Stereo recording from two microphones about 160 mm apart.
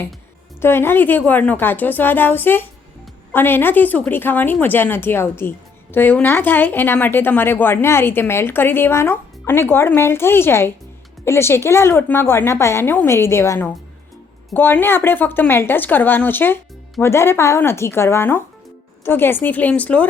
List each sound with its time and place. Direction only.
0.6 s a woman's voice: 15° left (ahead or behind)